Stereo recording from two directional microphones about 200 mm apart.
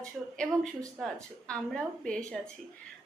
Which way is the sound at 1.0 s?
Centre (ahead or behind).